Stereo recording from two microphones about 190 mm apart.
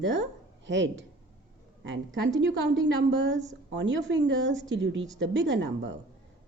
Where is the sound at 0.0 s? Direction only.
75° right (ahead or behind).